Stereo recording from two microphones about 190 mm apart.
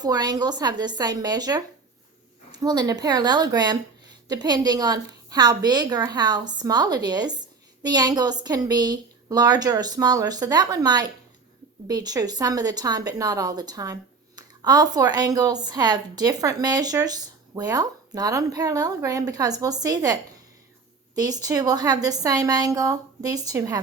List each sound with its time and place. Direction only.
0.0 s speech: 20° right (ahead or behind)
21.2 s speech: 20° right (ahead or behind)